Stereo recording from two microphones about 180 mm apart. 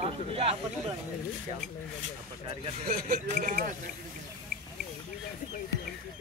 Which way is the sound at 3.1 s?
45° right (ahead or behind).